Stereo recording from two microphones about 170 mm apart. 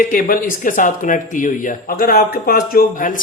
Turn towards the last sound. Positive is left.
turn(degrees=55)  # may be behind; listen again after turning